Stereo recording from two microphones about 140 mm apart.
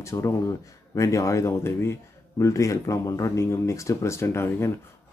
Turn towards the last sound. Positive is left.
turn(degrees=20)  # may be behind; listen again after turning